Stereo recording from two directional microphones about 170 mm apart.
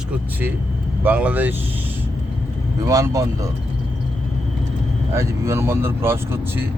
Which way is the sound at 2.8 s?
20° right (ahead or behind).